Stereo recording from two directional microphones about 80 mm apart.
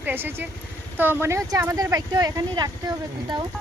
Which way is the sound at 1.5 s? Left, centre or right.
Right.